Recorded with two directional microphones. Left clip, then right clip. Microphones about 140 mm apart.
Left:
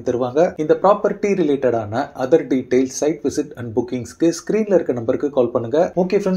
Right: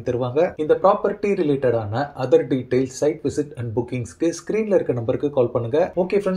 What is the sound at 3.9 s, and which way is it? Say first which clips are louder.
Speech: left 6 dB; 30° left (ahead or behind).